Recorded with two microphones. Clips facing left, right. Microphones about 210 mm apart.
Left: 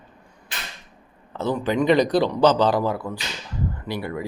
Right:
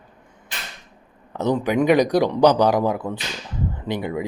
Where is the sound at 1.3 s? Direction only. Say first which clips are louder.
Right 3 dB; 15° right (ahead or behind).